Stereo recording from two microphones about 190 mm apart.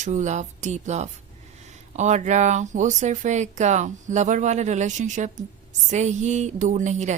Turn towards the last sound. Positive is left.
turn(degrees=-40)  # may be behind; listen again after turning